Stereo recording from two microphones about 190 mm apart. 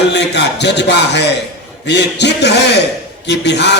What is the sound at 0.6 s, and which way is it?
A man's voice, 65° left (ahead or behind).